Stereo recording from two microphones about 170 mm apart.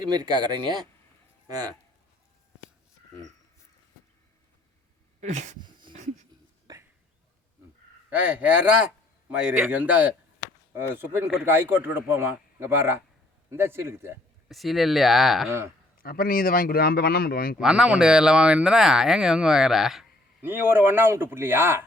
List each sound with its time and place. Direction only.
0.1 s speech: 25° right (ahead or behind)
5.2 s a sound: 45° right (ahead or behind)
5.5 s a sound: 25° right (ahead or behind)
5.9 s a sound: 50° right (ahead or behind)
8.1 s speech: 10° right (ahead or behind)
14.4 s speech: centre (ahead or behind)
15.4 s speech: 15° right (ahead or behind)
16.0 s speech: 60° left (ahead or behind)
17.6 s speech: 5° right (ahead or behind)
20.4 s speech: 15° right (ahead or behind)